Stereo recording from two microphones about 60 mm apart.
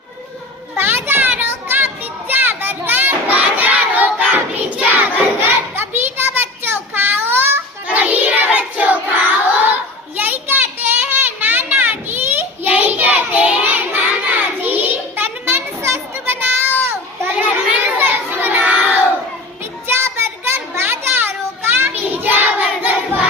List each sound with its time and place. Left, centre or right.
0.8 s a sound: right
4.8 s child singing: right
5.4 s child singing: right
7.9 s child singing: right
9.5 s a sound: right
17.7 s crowd: right
20.0 s children playing: right
21.9 s child singing: right